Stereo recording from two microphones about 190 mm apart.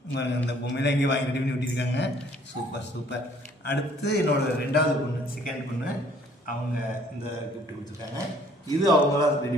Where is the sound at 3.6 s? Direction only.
60° left (ahead or behind).